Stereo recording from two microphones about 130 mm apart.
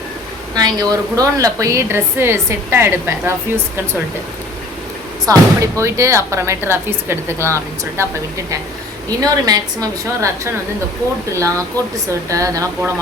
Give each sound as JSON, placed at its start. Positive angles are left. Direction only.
{"t": 0.5, "sound": "a woman's voice", "side_deg": -30}
{"t": 5.2, "sound": "a woman's voice", "side_deg": -25}
{"t": 9.0, "sound": "a woman's voice", "side_deg": -30}